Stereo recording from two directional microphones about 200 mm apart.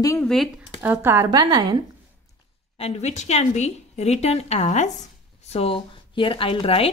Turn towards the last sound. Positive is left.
turn(degrees=30)  # may be behind; listen again after turning